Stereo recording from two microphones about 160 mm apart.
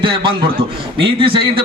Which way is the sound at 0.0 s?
30° right (ahead or behind).